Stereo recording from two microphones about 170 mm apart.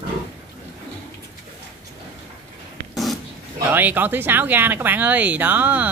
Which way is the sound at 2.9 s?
Centre (ahead or behind).